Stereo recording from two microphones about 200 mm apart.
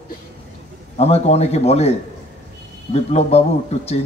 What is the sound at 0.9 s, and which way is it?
Speech, 30° left (ahead or behind).